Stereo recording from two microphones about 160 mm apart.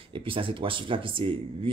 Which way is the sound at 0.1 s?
35° right (ahead or behind).